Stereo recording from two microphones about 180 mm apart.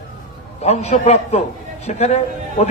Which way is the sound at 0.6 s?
35° left (ahead or behind).